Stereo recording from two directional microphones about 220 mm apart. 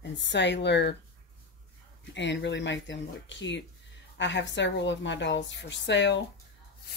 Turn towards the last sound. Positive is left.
turn(degrees=55)  # may be behind; listen again after turning